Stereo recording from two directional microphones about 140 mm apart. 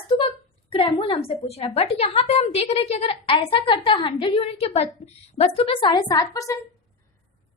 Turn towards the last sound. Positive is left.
turn(degrees=25)  # may be behind; listen again after turning